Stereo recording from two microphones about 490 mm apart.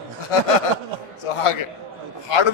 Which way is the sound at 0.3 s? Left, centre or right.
Left.